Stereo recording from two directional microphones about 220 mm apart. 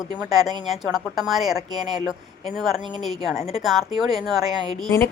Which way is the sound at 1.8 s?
20° right (ahead or behind).